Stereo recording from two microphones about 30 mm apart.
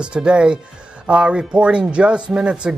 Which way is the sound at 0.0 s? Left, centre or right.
Right.